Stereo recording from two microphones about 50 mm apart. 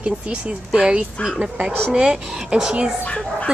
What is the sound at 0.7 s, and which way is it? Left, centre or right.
A woman's voice, centre.